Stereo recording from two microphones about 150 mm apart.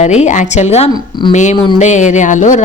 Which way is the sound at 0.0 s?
50° left (ahead or behind).